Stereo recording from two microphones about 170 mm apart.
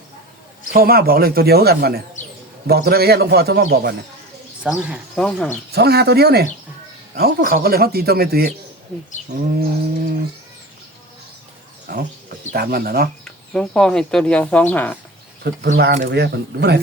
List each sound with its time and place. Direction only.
0.7 s a man's voice: 60° right (ahead or behind)
4.6 s speech: 5° right (ahead or behind)
5.1 s speech: 5° left (ahead or behind)
5.7 s a man's voice: 70° right (ahead or behind)
9.3 s a man's voice: 75° right (ahead or behind)
11.9 s a man's voice: 65° right (ahead or behind)
13.2 s speech: 5° left (ahead or behind)
15.6 s a man's voice: 65° right (ahead or behind)